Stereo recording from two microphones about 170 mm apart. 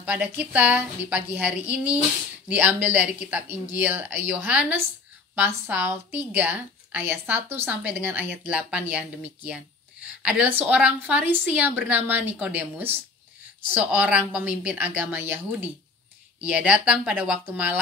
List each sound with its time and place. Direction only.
0.0 s a woman's voice: 10° right (ahead or behind)